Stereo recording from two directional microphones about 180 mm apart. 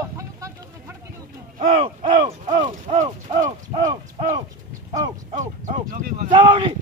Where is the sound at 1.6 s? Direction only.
35° right (ahead or behind).